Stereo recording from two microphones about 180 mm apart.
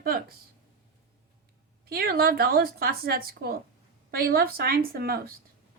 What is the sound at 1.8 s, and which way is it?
A woman's voice, 60° right (ahead or behind).